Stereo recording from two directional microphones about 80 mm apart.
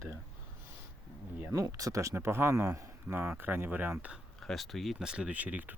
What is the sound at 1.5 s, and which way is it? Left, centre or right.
Speech, right.